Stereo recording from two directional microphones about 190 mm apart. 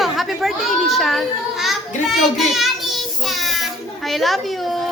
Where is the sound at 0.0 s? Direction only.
Centre (ahead or behind).